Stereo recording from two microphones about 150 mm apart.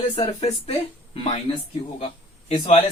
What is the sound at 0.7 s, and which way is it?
Speech, 40° left (ahead or behind).